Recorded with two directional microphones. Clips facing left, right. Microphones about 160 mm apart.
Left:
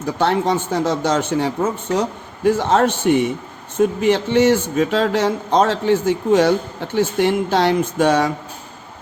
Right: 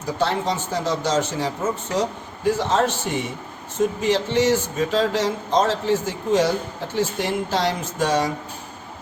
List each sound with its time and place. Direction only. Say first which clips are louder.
0.2 s speech: left 5 dB; 60° left (ahead or behind)